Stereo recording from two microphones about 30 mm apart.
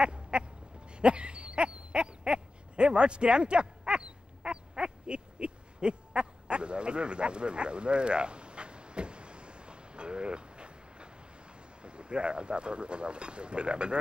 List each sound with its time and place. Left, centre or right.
0.0 s duck: right
0.9 s a sound: right
11.8 s speech: right